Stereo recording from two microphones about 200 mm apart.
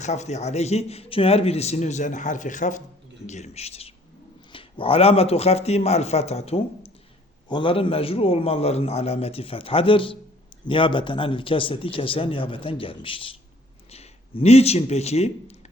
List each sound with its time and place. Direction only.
0.0 s a man's voice: 35° left (ahead or behind)